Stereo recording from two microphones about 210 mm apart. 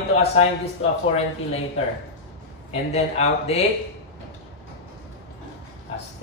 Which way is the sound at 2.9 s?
30° left (ahead or behind).